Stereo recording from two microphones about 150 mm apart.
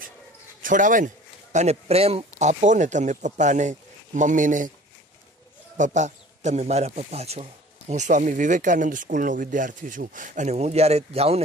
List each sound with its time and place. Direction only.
0.6 s a man's voice: 60° right (ahead or behind)
5.8 s speech: 55° right (ahead or behind)